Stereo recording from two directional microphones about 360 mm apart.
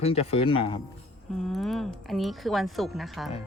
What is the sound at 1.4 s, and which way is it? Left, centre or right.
A woman's voice, centre.